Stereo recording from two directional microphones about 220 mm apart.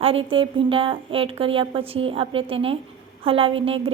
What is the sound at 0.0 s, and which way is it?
A woman's voice, 25° right (ahead or behind).